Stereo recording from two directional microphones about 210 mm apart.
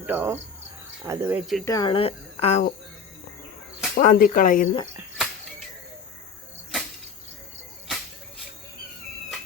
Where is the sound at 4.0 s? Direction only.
40° left (ahead or behind).